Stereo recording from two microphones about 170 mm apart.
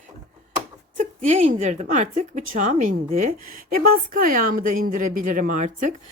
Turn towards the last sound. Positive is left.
turn(degrees=-45)  # may be behind; listen again after turning